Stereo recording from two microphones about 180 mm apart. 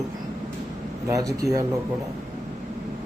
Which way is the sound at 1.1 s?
20° right (ahead or behind).